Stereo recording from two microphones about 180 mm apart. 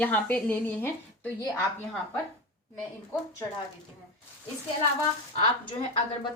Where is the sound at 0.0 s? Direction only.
10° left (ahead or behind).